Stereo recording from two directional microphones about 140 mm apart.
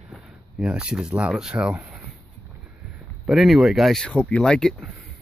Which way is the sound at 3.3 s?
Centre (ahead or behind).